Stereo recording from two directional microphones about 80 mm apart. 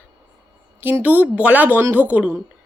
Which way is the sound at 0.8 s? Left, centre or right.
Right.